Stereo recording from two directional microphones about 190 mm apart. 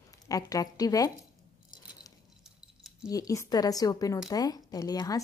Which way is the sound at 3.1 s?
20° left (ahead or behind).